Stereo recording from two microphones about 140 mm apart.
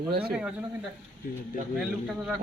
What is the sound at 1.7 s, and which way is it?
Speech, 5° right (ahead or behind).